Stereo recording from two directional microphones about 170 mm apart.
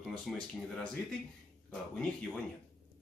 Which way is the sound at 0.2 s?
Centre (ahead or behind).